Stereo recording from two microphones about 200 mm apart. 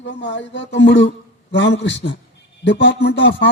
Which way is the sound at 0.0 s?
65° left (ahead or behind).